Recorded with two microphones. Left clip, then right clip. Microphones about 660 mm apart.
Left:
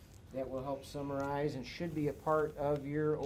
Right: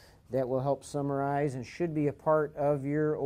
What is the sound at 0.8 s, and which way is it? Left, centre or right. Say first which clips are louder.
Speech: right 7 dB; right.